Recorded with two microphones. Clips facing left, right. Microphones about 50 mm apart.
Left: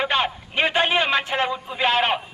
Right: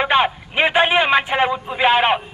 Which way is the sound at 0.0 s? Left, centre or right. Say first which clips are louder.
Right 6 dB; centre.